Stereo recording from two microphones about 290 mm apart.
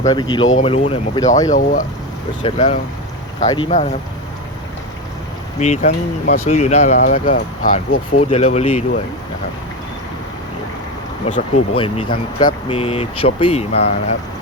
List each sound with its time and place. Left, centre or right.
0.0 s speech: centre
1.5 s speech: left
5.5 s speech: left
11.3 s speech: left